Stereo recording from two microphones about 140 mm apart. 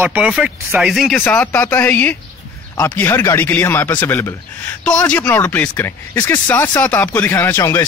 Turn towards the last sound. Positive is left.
turn(degrees=20)  # may be behind; listen again after turning